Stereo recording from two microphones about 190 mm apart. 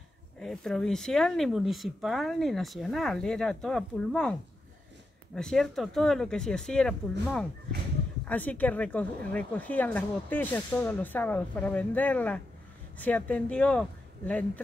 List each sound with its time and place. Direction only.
0.4 s a woman's voice: centre (ahead or behind)